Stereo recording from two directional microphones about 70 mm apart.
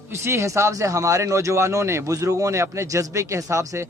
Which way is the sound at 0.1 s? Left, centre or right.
Right.